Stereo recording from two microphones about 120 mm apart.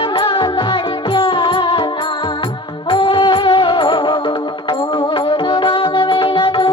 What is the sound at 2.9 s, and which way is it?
Music, 50° left (ahead or behind).